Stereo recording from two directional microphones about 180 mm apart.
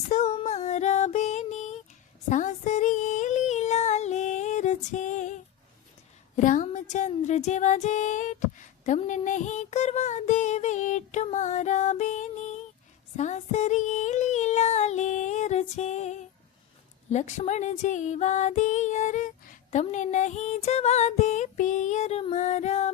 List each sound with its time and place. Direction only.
0.1 s music: 40° left (ahead or behind)
2.3 s a sound: 45° left (ahead or behind)
6.3 s music: 45° left (ahead or behind)
13.1 s female singing: 40° left (ahead or behind)
17.1 s music: 40° left (ahead or behind)